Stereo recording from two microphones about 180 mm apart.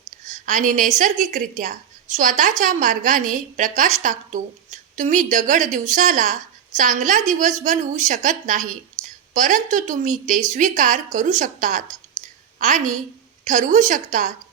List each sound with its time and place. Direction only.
0.3 s a woman's voice: 45° right (ahead or behind)